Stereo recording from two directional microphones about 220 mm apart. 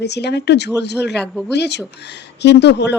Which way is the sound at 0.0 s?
50° left (ahead or behind).